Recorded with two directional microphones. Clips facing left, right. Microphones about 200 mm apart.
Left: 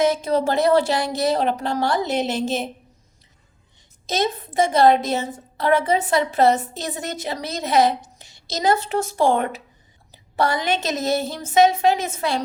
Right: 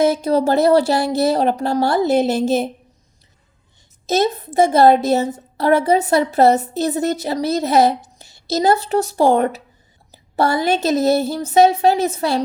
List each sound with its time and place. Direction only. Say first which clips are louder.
0.0 s a woman's voice: right 4 dB; 40° right (ahead or behind)
4.1 s a woman's voice: right 5 dB; 40° right (ahead or behind)